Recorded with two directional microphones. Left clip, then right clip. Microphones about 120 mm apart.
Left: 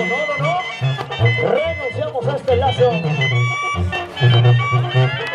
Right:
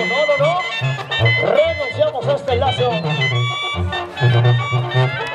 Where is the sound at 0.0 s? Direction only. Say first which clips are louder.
Right 4 dB; 20° right (ahead or behind).